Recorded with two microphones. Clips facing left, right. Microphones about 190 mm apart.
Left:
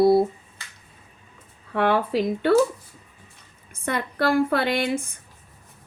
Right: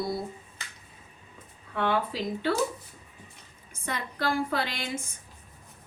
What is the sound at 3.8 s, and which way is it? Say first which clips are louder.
Speech: left 7 dB; 60° left (ahead or behind).